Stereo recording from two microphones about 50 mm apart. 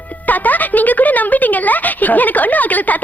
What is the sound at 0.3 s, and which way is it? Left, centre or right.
Speech, left.